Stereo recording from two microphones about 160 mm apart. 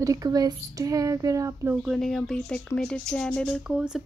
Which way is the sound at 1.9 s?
5° left (ahead or behind).